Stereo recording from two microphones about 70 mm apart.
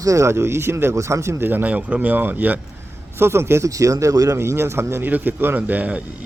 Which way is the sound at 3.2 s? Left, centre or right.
Right.